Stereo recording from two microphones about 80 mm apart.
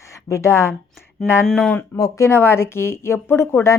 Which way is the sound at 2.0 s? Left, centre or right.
Left.